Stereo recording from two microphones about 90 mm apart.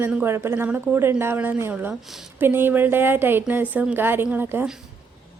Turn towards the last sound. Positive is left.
turn(degrees=-20)  # may be behind; listen again after turning